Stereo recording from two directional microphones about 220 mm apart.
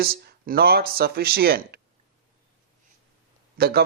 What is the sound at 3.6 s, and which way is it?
Speech, 45° right (ahead or behind).